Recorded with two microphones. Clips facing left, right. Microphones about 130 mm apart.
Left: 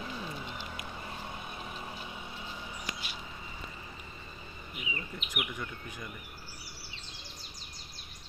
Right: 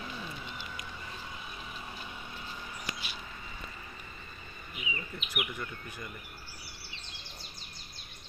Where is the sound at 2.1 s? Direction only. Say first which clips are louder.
Left 1 dB; 15° left (ahead or behind).